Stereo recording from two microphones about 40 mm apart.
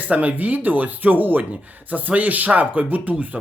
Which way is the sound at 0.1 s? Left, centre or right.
Right.